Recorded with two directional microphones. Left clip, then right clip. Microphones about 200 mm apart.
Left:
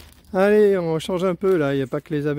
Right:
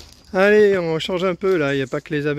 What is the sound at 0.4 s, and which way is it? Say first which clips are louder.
Speech: right 2 dB; 10° left (ahead or behind).